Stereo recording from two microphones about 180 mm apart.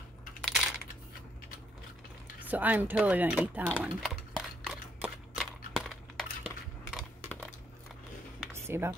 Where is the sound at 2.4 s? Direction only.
10° right (ahead or behind).